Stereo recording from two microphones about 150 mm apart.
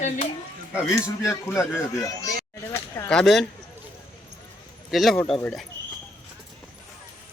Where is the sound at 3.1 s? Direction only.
5° left (ahead or behind).